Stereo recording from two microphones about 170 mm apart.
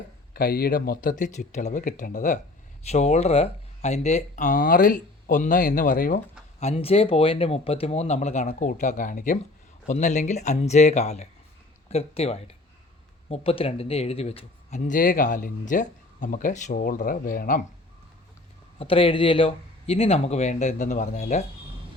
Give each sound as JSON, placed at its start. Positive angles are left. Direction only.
{"t": 0.3, "sound": "speech", "side_deg": 60}
{"t": 6.6, "sound": "speech", "side_deg": 35}
{"t": 18.8, "sound": "speech", "side_deg": 30}